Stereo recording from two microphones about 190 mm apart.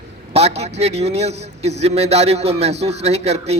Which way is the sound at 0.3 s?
35° right (ahead or behind).